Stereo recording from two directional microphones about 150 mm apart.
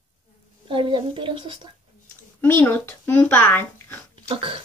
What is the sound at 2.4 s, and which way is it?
A child's voice, 15° left (ahead or behind).